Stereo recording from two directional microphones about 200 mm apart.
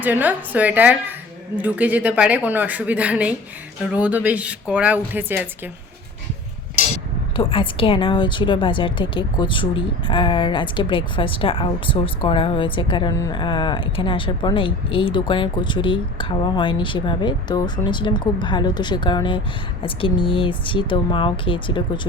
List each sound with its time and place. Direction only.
0.0 s a woman's voice: 10° right (ahead or behind)
7.3 s a woman's voice: 25° left (ahead or behind)